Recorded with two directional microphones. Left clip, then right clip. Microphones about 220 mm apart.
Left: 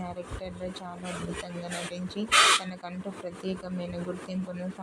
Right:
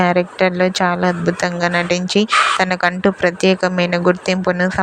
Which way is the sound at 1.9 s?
40° right (ahead or behind).